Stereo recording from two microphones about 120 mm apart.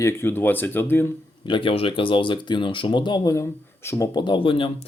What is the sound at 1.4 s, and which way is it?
Speech, 45° left (ahead or behind).